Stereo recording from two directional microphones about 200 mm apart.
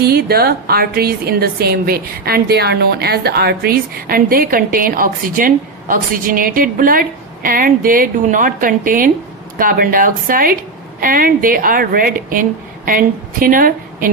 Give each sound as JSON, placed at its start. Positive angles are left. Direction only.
{"t": 0.0, "sound": "a woman's voice", "side_deg": -50}